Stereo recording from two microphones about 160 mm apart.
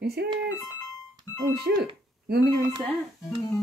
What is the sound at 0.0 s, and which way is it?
Speech, 90° right.